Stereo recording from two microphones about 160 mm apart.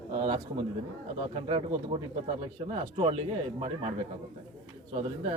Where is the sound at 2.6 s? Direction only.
40° right (ahead or behind).